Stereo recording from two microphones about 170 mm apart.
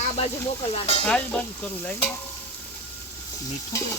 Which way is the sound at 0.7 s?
35° left (ahead or behind).